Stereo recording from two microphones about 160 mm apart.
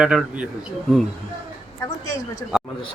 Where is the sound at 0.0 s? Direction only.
5° right (ahead or behind).